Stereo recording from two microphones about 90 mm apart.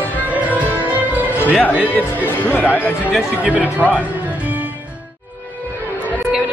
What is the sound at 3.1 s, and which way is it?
Speech, 10° right (ahead or behind).